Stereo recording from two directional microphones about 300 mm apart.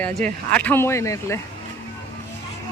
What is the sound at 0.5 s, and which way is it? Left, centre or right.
Speech, centre.